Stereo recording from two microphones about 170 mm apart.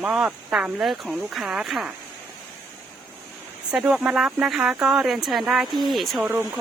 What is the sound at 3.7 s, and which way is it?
Speech, 5° right (ahead or behind).